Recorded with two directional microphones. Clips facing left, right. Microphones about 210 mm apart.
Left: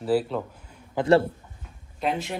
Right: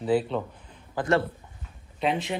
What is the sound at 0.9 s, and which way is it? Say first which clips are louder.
Speech: left 5 dB; 25° left (ahead or behind).